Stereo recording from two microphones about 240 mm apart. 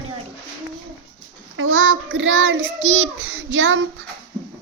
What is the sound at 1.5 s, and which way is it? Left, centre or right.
Child singing, right.